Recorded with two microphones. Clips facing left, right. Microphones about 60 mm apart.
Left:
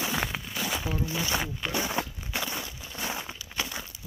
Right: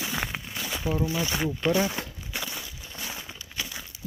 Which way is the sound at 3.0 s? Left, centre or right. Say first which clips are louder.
Left 4 dB; left.